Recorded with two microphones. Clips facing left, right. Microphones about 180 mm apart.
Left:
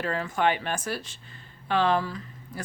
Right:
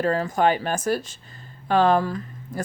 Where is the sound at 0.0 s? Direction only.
40° right (ahead or behind).